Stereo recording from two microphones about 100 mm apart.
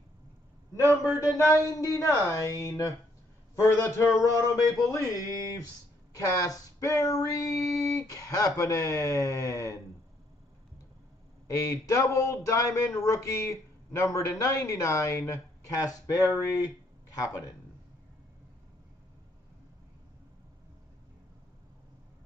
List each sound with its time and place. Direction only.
1.2 s speech: 30° left (ahead or behind)
11.7 s speech: 30° left (ahead or behind)